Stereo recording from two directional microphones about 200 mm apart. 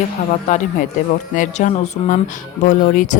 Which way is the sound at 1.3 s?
40° left (ahead or behind).